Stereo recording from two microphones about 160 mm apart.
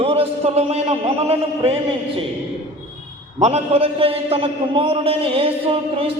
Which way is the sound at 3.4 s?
40° right (ahead or behind).